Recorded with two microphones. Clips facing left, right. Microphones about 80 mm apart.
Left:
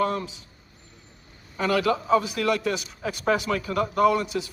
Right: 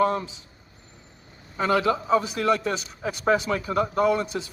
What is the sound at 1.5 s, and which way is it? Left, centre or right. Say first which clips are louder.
A man's voice: right 1 dB; right.